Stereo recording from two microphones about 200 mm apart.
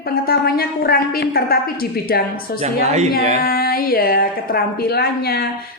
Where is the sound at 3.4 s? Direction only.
50° left (ahead or behind).